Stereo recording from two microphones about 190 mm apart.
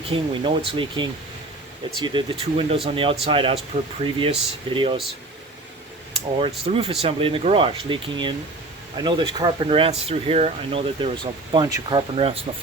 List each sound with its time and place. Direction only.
0.1 s speech: 25° right (ahead or behind)
6.4 s speech: 30° right (ahead or behind)